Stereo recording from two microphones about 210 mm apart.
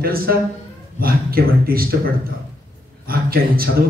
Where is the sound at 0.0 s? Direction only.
45° right (ahead or behind).